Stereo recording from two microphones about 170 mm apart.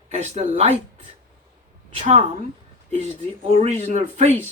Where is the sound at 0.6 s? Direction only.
40° right (ahead or behind).